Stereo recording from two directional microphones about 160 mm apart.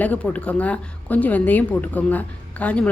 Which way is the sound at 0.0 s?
10° left (ahead or behind).